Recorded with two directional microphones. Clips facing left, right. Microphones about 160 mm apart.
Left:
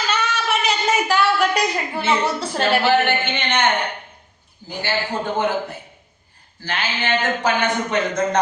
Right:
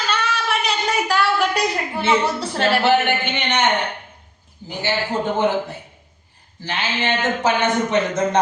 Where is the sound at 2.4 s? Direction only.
Centre (ahead or behind).